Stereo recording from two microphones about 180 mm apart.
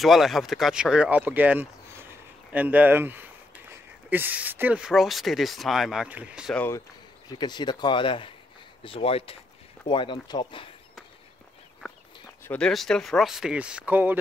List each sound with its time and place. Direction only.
0.0 s speech: centre (ahead or behind)
6.5 s speech: 10° left (ahead or behind)
7.2 s speech: 25° left (ahead or behind)
12.4 s speech: 5° left (ahead or behind)